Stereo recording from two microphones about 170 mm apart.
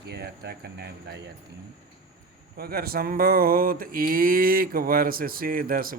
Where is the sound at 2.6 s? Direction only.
65° right (ahead or behind).